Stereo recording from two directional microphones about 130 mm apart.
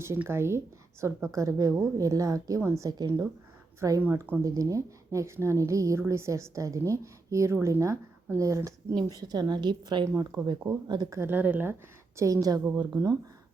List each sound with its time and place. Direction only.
0.0 s a woman's voice: 20° right (ahead or behind)
11.2 s a woman's voice: 15° right (ahead or behind)